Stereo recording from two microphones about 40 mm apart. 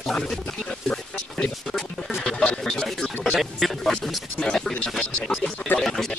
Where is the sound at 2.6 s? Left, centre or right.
Centre.